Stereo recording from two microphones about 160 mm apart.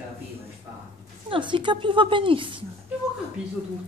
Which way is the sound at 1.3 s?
30° right (ahead or behind).